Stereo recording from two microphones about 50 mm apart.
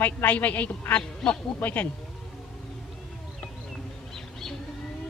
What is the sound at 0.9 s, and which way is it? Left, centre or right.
Speech, centre.